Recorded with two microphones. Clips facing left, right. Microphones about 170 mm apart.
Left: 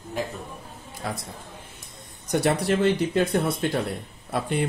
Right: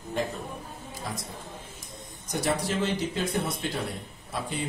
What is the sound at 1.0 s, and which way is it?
Speech, 65° left (ahead or behind).